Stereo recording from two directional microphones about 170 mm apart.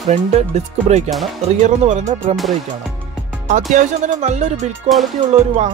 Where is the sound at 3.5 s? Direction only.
45° right (ahead or behind).